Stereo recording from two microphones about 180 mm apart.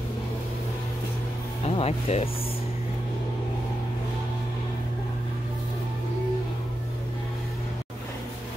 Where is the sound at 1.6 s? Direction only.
35° left (ahead or behind).